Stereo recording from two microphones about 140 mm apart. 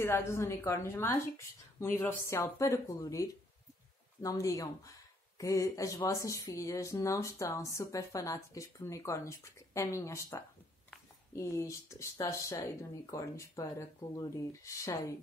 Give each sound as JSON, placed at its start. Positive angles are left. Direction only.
{"t": 0.0, "sound": "speech", "side_deg": 20}